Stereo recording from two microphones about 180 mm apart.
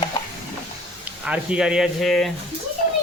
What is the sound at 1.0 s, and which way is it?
Speech, 5° right (ahead or behind).